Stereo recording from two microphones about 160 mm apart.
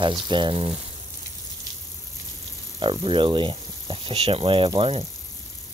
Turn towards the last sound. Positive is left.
turn(degrees=-35)  # may be behind; listen again after turning